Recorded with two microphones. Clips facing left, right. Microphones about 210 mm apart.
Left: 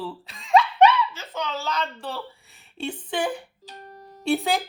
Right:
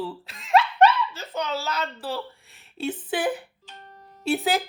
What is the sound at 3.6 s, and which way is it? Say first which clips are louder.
Music: left 4 dB; 35° left (ahead or behind).